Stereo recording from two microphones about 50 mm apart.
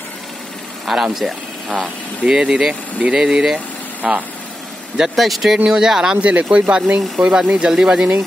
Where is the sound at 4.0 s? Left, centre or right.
Right.